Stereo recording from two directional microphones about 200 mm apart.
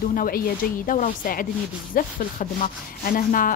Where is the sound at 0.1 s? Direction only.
45° left (ahead or behind).